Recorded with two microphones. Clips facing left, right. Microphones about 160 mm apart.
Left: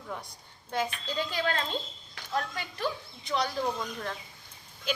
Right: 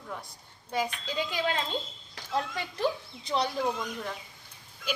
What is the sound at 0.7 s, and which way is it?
Speech, 10° right (ahead or behind).